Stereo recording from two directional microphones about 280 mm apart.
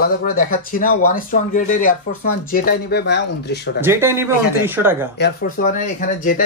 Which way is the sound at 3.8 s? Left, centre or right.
Centre.